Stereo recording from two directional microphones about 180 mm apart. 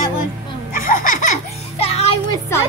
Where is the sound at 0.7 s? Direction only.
50° left (ahead or behind).